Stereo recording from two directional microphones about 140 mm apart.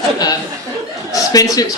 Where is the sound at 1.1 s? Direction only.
25° left (ahead or behind).